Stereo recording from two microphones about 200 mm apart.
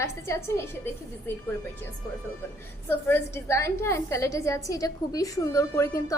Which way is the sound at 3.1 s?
15° left (ahead or behind).